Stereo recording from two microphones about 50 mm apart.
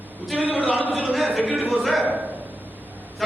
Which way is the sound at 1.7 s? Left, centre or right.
Centre.